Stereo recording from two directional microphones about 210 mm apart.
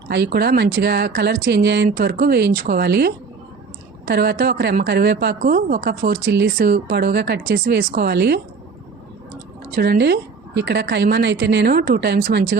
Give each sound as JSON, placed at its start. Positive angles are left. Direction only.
{"t": 0.1, "sound": "a woman's voice", "side_deg": -50}
{"t": 9.7, "sound": "a woman's voice", "side_deg": -50}